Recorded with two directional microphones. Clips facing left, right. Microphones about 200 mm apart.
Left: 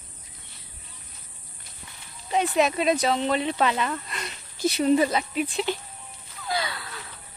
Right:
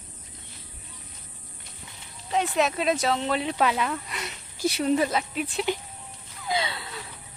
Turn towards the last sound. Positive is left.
turn(degrees=-25)  # may be behind; listen again after turning